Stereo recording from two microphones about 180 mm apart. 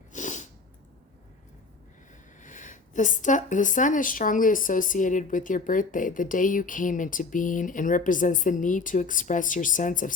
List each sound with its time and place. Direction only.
0.1 s sneeze: 45° left (ahead or behind)
2.4 s speech: 45° left (ahead or behind)